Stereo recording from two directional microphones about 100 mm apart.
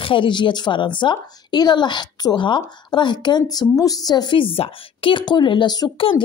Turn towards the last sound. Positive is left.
turn(degrees=60)  # may be behind; listen again after turning